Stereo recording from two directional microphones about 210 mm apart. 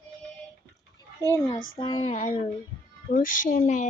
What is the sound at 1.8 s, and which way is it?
Child singing, 25° left (ahead or behind).